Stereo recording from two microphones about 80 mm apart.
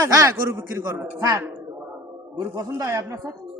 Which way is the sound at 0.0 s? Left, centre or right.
Right.